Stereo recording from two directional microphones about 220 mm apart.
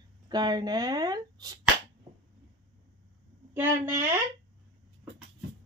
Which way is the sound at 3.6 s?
10° right (ahead or behind).